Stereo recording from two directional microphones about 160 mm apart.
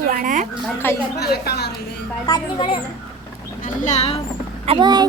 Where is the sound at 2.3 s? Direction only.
30° left (ahead or behind).